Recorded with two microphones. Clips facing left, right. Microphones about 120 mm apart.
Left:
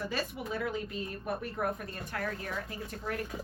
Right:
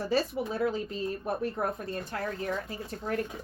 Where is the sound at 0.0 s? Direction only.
35° right (ahead or behind).